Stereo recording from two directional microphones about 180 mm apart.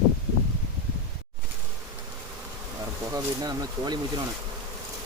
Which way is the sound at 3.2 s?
20° right (ahead or behind).